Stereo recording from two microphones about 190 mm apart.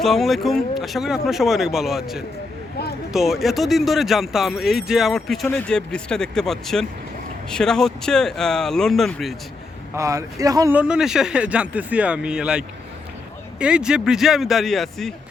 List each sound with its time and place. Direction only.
0.0 s speech: centre (ahead or behind)
9.9 s speech: 15° right (ahead or behind)
10.8 s speech: 5° right (ahead or behind)